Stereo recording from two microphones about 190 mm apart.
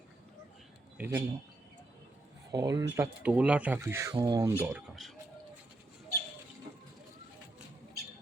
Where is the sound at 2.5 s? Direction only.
20° right (ahead or behind).